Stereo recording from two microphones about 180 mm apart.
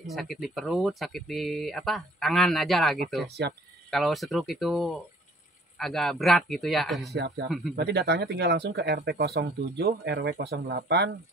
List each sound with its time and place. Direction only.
0.0 s speech: centre (ahead or behind)
3.3 s speech: 65° right (ahead or behind)
3.9 s speech: centre (ahead or behind)
7.2 s speech: 65° right (ahead or behind)
7.4 s speech: centre (ahead or behind)
7.7 s speech: 65° right (ahead or behind)